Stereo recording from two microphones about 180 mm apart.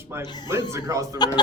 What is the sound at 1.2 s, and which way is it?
Speech, 25° left (ahead or behind).